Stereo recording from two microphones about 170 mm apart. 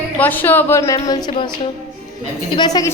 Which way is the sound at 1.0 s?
25° left (ahead or behind).